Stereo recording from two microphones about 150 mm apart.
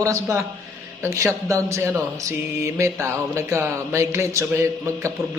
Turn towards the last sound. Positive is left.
turn(degrees=-20)  # may be behind; listen again after turning